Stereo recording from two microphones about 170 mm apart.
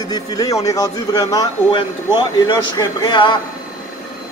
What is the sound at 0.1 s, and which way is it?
A man's voice, 20° left (ahead or behind).